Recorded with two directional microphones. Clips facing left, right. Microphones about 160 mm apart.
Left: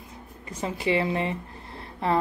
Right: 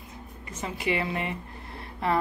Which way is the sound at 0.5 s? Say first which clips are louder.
Left 3 dB; 35° left (ahead or behind).